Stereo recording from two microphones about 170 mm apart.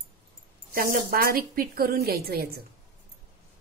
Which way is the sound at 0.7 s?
55° right (ahead or behind).